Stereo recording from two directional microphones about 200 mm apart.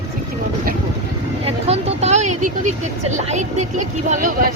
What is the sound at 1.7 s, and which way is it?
Vehicle, 35° right (ahead or behind).